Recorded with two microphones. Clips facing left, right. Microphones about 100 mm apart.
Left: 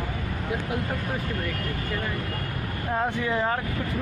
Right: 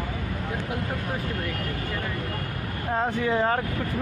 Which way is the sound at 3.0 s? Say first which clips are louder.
Right 3 dB; 35° right (ahead or behind).